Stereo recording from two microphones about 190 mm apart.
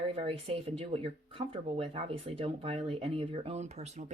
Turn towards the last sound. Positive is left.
turn(degrees=-35)  # may be behind; listen again after turning